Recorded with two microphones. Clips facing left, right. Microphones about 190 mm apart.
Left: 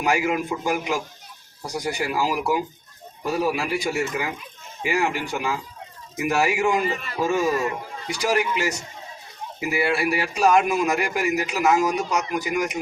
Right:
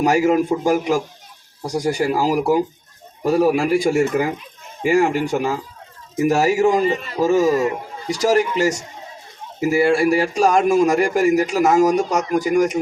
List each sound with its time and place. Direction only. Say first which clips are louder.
0.0 s a man's voice: right 7 dB; 40° right (ahead or behind)
6.8 s a man's voice: right 7 dB; 25° right (ahead or behind)
7.2 s a man's voice: right 6 dB; 40° right (ahead or behind)
7.5 s a man's voice: right 6 dB; 25° right (ahead or behind)
8.0 s a man's voice: right 6 dB; 40° right (ahead or behind)